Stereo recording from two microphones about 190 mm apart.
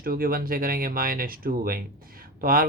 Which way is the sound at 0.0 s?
50° right (ahead or behind).